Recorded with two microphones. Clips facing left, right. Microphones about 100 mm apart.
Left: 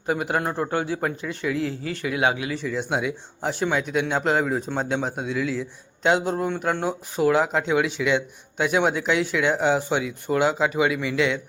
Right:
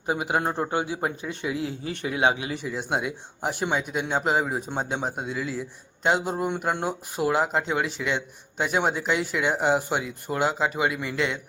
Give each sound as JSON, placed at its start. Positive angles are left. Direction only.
{"t": 0.1, "sound": "speech", "side_deg": -20}
{"t": 2.6, "sound": "speech", "side_deg": -10}